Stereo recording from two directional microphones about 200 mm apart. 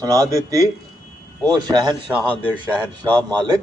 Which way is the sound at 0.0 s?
20° right (ahead or behind).